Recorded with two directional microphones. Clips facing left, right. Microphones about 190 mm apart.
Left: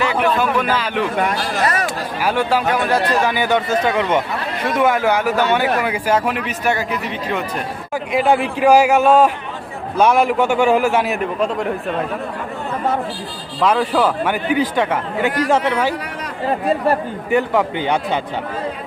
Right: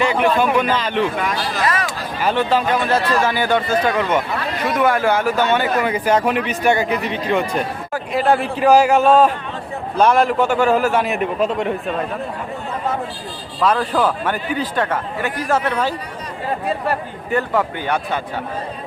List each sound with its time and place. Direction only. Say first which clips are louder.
0.0 s speech: right 1 dB; 5° left (ahead or behind)
1.2 s speech: left 2 dB; 45° left (ahead or behind)
2.2 s speech: even; 10° left (ahead or behind)
13.6 s speech: left 1 dB; 10° left (ahead or behind)
17.3 s speech: left 2 dB; 15° left (ahead or behind)